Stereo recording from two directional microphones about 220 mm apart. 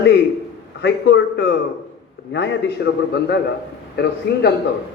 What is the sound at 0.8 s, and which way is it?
A man's voice, 50° left (ahead or behind).